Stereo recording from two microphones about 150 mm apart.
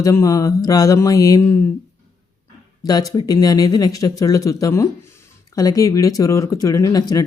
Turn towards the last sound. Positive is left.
turn(degrees=25)  # may be behind; listen again after turning